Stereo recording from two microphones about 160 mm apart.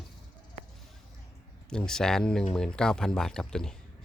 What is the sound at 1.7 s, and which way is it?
Speech, 5° left (ahead or behind).